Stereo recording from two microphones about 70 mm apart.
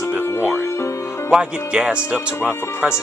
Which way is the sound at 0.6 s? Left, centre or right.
Left.